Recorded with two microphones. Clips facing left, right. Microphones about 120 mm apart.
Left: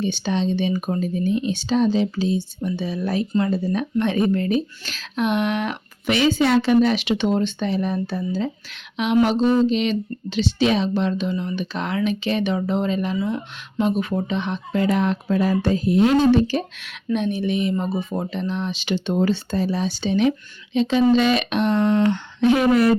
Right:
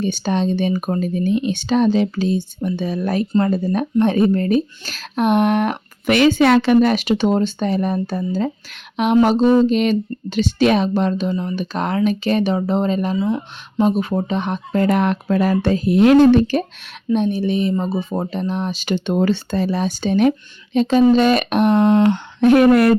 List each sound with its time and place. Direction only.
0.0 s a woman's voice: 45° right (ahead or behind)
13.1 s speech: 20° right (ahead or behind)
13.8 s speech: 35° right (ahead or behind); by 16.6 s 55° right (ahead or behind)
17.1 s speech: 35° right (ahead or behind); by 23.0 s 60° right (ahead or behind)